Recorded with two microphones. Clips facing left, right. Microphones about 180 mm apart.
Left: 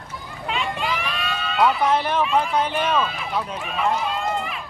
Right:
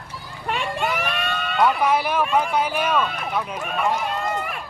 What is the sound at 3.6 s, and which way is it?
Speech, 45° right (ahead or behind).